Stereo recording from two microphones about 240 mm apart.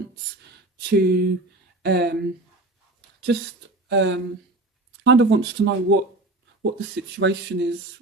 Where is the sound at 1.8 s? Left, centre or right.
Right.